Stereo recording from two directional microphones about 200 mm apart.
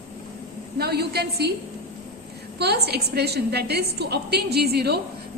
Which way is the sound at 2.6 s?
55° right (ahead or behind).